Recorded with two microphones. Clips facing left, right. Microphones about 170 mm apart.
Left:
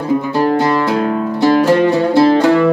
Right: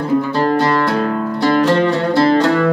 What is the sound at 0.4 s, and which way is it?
Music, 10° left (ahead or behind).